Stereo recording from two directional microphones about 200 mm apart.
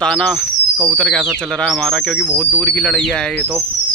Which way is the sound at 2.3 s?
10° left (ahead or behind).